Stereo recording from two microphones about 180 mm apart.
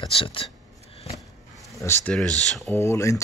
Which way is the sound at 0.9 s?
35° left (ahead or behind).